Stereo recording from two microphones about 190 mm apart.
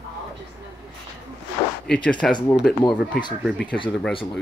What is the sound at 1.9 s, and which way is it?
Speech, 5° left (ahead or behind).